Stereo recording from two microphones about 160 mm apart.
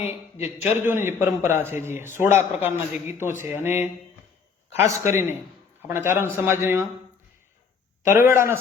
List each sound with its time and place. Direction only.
0.1 s a man's voice: 15° right (ahead or behind)
8.0 s a man's voice: 15° right (ahead or behind)